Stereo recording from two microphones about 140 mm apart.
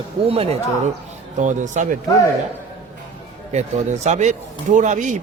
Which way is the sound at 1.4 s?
60° right (ahead or behind).